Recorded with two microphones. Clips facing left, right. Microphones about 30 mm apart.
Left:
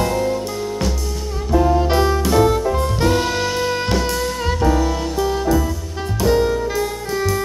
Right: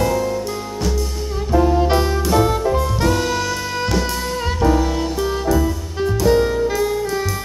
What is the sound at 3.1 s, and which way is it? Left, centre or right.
Saxophone, left.